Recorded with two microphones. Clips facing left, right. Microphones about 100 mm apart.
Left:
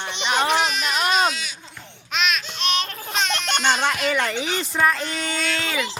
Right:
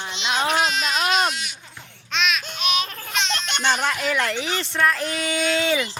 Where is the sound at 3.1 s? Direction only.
40° left (ahead or behind).